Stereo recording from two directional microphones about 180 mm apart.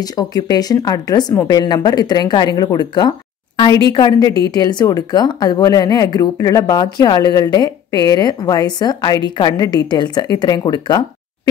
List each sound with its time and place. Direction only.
0.0 s speech: 20° left (ahead or behind)